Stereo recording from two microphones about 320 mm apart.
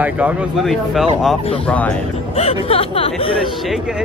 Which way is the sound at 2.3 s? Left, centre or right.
Centre.